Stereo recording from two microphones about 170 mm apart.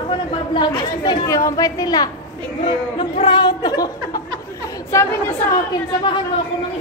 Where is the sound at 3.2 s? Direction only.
25° left (ahead or behind).